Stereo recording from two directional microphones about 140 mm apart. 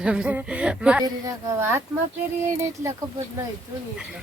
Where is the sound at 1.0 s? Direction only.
20° right (ahead or behind).